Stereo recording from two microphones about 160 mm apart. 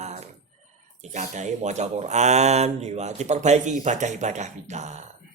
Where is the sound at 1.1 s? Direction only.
50° right (ahead or behind).